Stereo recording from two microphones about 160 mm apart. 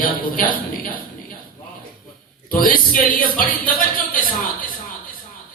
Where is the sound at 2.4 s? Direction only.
60° left (ahead or behind).